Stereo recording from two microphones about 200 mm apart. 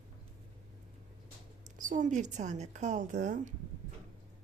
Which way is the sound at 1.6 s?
40° right (ahead or behind).